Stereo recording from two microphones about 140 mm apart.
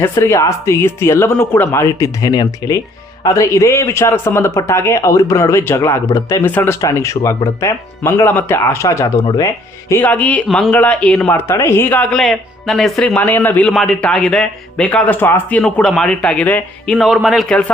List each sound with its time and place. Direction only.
0.0 s a man's voice: 20° left (ahead or behind)
6.4 s a man's voice: 15° left (ahead or behind)
11.3 s speech: 20° left (ahead or behind)